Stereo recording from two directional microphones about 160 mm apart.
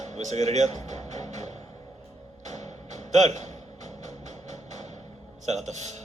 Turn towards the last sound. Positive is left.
turn(degrees=-45)  # may be behind; listen again after turning